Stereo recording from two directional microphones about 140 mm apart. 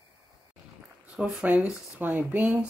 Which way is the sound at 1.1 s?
5° right (ahead or behind).